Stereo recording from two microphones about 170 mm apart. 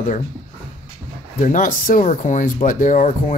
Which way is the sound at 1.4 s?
50° left (ahead or behind).